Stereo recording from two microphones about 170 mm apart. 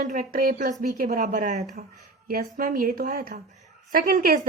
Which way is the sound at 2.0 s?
60° right (ahead or behind).